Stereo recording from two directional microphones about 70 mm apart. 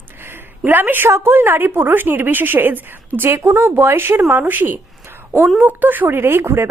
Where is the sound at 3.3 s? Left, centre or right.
Right.